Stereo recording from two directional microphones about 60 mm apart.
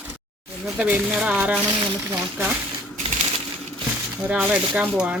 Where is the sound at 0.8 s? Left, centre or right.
Right.